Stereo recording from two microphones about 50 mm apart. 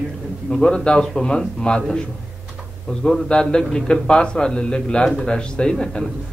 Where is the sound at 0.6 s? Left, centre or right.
Centre.